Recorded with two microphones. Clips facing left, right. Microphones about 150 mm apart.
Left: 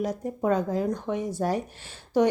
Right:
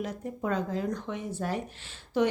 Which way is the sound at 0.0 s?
40° left (ahead or behind).